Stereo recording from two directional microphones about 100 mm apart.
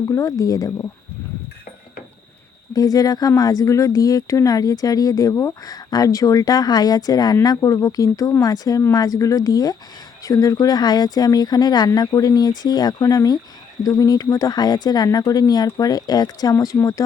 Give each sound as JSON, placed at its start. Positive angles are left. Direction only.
{"t": 0.1, "sound": "speech", "side_deg": 30}
{"t": 2.7, "sound": "speech", "side_deg": 40}